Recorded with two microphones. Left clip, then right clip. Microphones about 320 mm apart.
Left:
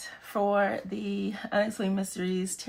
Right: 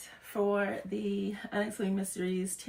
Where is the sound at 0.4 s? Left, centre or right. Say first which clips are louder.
Left 5 dB; centre.